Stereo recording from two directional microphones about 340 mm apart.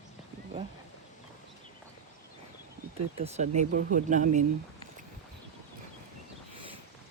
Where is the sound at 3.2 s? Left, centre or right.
Centre.